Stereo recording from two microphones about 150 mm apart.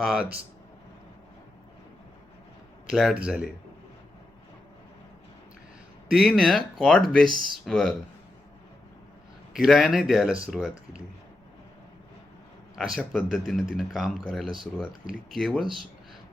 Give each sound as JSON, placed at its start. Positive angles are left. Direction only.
{"t": 0.0, "sound": "speech", "side_deg": -5}
{"t": 2.9, "sound": "speech", "side_deg": -5}
{"t": 6.1, "sound": "speech", "side_deg": -5}
{"t": 7.3, "sound": "speech", "side_deg": -30}
{"t": 7.6, "sound": "speech", "side_deg": 5}
{"t": 9.5, "sound": "speech", "side_deg": -5}
{"t": 13.0, "sound": "speech", "side_deg": 0}